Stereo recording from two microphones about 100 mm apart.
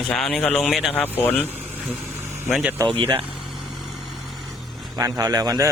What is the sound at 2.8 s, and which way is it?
Speech, 35° right (ahead or behind).